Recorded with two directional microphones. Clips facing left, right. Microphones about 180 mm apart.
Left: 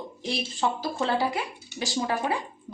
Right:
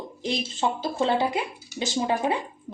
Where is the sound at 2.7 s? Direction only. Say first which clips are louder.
Right 1 dB; 25° right (ahead or behind).